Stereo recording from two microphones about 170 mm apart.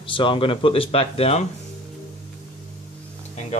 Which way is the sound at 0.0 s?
30° left (ahead or behind).